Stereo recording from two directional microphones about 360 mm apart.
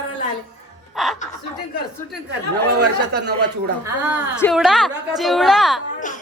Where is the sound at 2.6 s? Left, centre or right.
Right.